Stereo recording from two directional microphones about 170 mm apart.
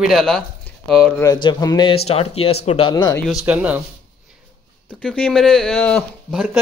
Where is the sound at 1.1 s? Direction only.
25° left (ahead or behind).